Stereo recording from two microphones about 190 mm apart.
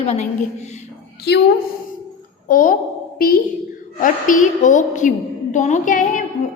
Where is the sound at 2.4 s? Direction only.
45° left (ahead or behind).